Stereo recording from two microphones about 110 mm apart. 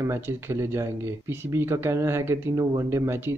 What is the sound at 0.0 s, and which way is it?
Speech, 25° right (ahead or behind).